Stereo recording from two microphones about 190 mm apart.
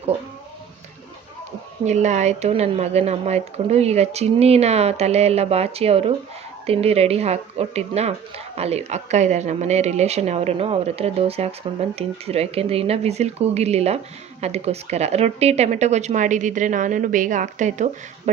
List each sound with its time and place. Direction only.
1.8 s speech: 35° right (ahead or behind)